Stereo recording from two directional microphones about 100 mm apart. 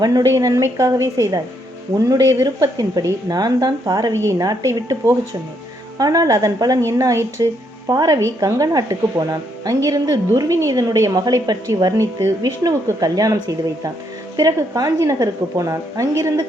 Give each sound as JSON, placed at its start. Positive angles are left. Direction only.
{"t": 0.0, "sound": "speech", "side_deg": -40}
{"t": 4.1, "sound": "speech", "side_deg": -30}